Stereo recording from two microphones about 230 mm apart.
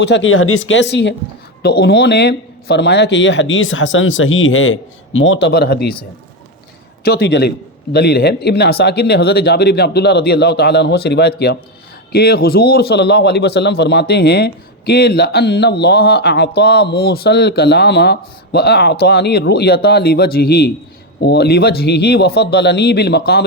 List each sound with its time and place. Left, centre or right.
0.0 s speech: left
7.0 s speech: left